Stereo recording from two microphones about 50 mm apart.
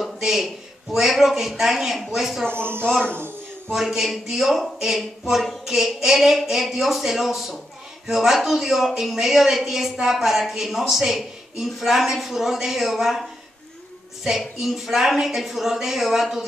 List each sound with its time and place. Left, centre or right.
0.2 s a woman's voice: centre
2.5 s speech: right
3.7 s a woman's voice: centre
14.6 s a woman's voice: centre